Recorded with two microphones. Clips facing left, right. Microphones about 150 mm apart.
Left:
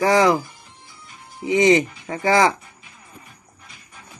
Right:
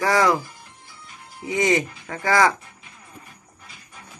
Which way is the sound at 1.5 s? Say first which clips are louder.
Left 5 dB; 20° left (ahead or behind).